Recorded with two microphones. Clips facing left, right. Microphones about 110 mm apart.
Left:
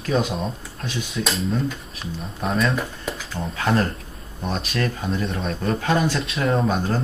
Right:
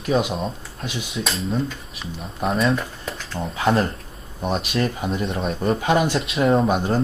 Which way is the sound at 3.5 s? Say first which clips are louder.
Right 2 dB; 30° right (ahead or behind).